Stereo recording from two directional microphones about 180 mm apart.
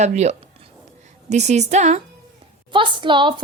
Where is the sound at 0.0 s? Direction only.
40° right (ahead or behind).